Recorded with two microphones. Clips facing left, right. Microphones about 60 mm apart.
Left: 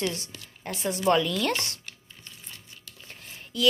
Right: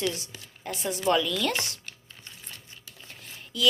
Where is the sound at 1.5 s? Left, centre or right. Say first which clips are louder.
Left 1 dB; right.